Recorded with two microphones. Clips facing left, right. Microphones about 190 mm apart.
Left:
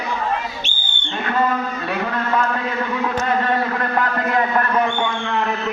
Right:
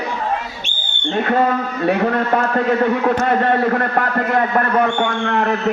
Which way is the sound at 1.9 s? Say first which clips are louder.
Right 7 dB; 50° right (ahead or behind).